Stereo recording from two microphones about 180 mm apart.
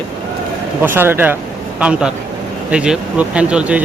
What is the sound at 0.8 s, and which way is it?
Speech, 10° right (ahead or behind).